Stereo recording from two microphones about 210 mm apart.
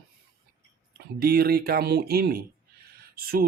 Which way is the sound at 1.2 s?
45° right (ahead or behind).